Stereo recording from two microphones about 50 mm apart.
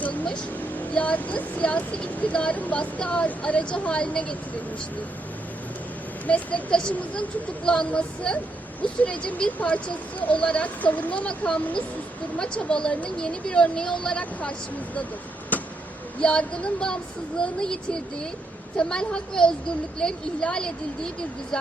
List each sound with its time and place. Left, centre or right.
0.0 s vehicle: left
0.8 s speech: left
6.2 s speech: left
12.6 s speech: centre
15.5 s vehicle: left
16.2 s speech: centre